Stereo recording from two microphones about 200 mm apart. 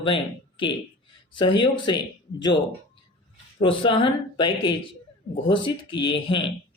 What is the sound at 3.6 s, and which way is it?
Speech, 25° left (ahead or behind).